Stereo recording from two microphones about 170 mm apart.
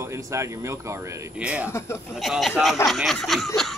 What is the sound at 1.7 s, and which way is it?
Speech, 15° left (ahead or behind).